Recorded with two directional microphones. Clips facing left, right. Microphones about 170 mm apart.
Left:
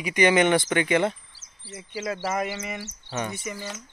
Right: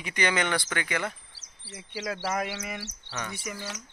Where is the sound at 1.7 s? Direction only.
Centre (ahead or behind).